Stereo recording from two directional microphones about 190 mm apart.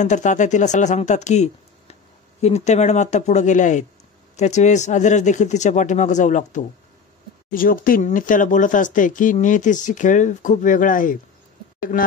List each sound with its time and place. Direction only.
0.0 s speech: 40° left (ahead or behind)